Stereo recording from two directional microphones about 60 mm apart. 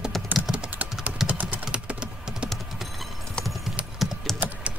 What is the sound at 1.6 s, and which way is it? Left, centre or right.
Typing, centre.